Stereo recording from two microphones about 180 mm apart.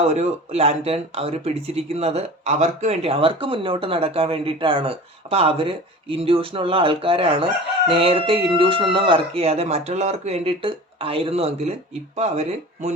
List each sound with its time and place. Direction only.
0.0 s speech: 35° right (ahead or behind)